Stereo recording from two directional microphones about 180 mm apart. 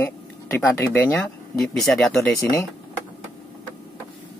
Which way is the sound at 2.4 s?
15° left (ahead or behind).